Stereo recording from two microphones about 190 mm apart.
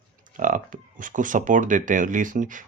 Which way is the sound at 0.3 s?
45° right (ahead or behind).